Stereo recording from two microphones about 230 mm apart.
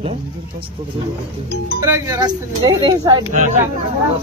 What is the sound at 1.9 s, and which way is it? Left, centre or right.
Speech, centre.